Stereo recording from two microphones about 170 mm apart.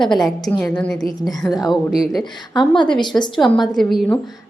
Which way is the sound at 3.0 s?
25° left (ahead or behind).